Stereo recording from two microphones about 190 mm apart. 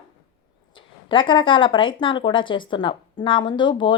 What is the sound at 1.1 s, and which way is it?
Speech, 25° left (ahead or behind).